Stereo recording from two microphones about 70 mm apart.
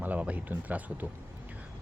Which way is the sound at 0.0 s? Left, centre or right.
Right.